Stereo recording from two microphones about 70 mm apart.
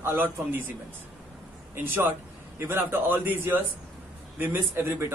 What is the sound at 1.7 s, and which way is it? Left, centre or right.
A man's voice, right.